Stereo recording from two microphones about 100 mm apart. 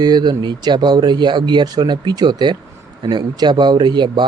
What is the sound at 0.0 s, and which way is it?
Speech, 45° right (ahead or behind).